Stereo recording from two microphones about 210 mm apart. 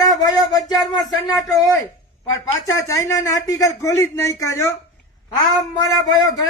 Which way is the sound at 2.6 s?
15° left (ahead or behind).